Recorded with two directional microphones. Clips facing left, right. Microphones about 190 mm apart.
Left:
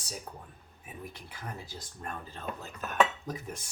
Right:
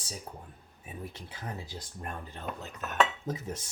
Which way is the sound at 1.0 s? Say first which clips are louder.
Right 2 dB; 25° right (ahead or behind).